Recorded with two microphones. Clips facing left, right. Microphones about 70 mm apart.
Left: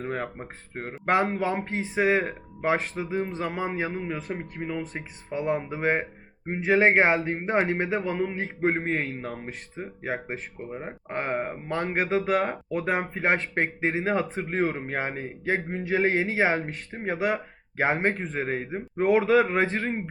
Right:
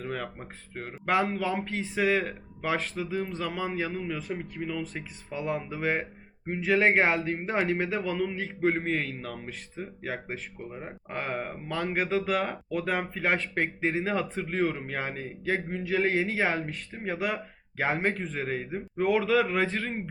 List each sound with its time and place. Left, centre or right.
0.0 s a man's voice: left
4.2 s a man's voice: left
6.9 s a man's voice: centre
7.2 s a man's voice: left
13.2 s a man's voice: left
14.0 s a man's voice: left